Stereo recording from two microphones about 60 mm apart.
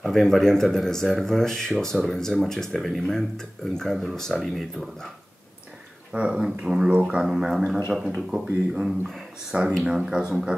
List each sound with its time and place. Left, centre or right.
0.0 s speech: centre
6.1 s speech: centre
9.8 s speech: centre